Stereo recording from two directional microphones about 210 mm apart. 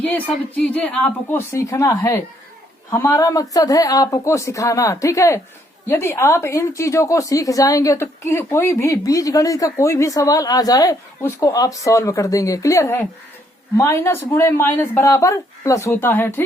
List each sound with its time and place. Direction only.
0.5 s a woman's voice: 5° left (ahead or behind)